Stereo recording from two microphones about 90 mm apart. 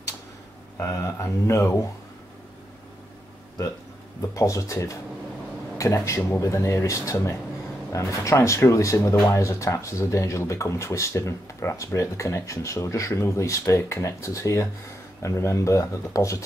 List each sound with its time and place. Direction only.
0.9 s speech: 30° left (ahead or behind)
4.3 s speech: 35° left (ahead or behind)